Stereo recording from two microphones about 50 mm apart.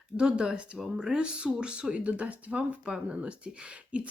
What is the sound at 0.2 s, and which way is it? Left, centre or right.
Speech, centre.